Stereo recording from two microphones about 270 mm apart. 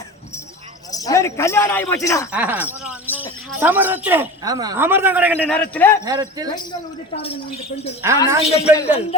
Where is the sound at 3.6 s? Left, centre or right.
Centre.